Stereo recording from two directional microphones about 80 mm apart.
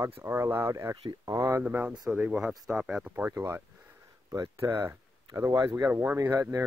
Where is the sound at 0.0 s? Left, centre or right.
Right.